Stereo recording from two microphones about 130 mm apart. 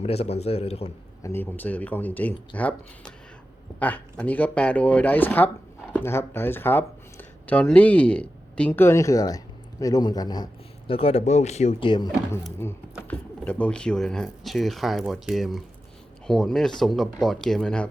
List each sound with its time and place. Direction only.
0.0 s a man's voice: 50° left (ahead or behind)
1.2 s a man's voice: 15° left (ahead or behind); by 10.9 s 35° left (ahead or behind)
10.9 s speech: 50° left (ahead or behind)
11.8 s speech: 40° left (ahead or behind)
12.6 s speech: 20° left (ahead or behind)